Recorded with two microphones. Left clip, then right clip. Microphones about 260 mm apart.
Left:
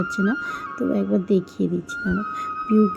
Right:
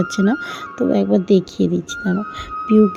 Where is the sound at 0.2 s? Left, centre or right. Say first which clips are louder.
Right 4 dB; right.